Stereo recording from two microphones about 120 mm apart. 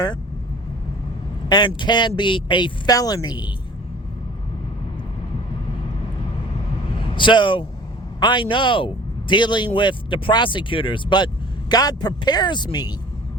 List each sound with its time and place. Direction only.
1.5 s speech: 35° left (ahead or behind)
7.2 s speech: 40° left (ahead or behind)